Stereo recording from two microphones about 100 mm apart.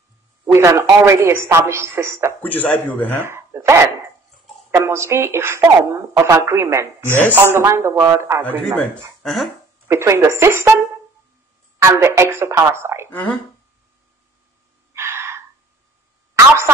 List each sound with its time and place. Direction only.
0.5 s speech: 30° right (ahead or behind)
2.4 s a man's voice: 15° left (ahead or behind)
3.2 s speech: 25° right (ahead or behind)
9.2 s speech: centre (ahead or behind)
9.8 s speech: 25° right (ahead or behind)
11.8 s speech: 25° right (ahead or behind)
13.1 s a man's voice: 15° left (ahead or behind)
15.0 s a sound: 25° right (ahead or behind)
16.3 s a woman's voice: 25° right (ahead or behind)